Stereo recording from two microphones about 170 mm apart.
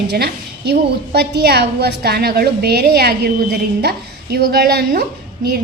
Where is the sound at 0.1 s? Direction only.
75° right (ahead or behind).